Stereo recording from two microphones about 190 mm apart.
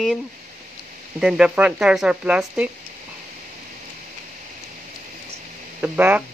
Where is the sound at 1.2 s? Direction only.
5° right (ahead or behind).